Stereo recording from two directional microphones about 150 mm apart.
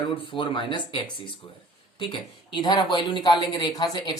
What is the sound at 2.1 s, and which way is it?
Speech, 30° left (ahead or behind).